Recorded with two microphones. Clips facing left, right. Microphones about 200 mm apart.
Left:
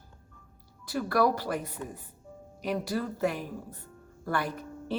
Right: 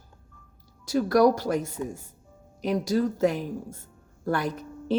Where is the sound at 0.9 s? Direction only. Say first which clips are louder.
Right 6 dB; 45° right (ahead or behind).